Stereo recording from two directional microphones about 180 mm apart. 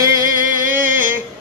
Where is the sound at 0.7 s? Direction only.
10° right (ahead or behind).